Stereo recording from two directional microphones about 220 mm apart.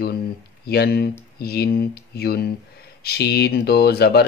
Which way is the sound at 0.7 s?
45° left (ahead or behind).